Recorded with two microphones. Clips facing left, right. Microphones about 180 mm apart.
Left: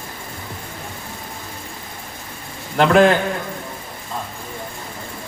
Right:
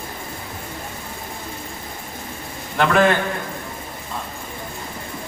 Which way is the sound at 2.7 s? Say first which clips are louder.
Left 4 dB; 35° left (ahead or behind).